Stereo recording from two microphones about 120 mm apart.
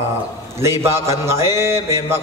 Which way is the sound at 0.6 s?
20° right (ahead or behind).